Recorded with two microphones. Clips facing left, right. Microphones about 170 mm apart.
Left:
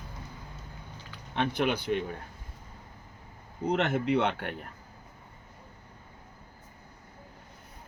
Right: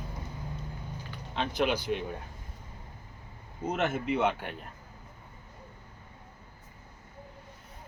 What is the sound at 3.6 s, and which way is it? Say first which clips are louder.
Speech: left 3 dB; 65° left (ahead or behind).